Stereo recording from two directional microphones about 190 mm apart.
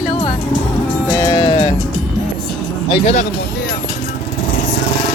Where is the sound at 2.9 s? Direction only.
35° left (ahead or behind).